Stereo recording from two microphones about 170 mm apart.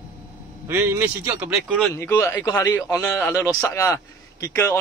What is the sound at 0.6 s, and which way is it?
A man's voice, 15° right (ahead or behind).